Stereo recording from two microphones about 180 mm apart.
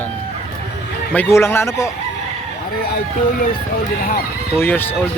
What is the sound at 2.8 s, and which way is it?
Speech, 60° left (ahead or behind).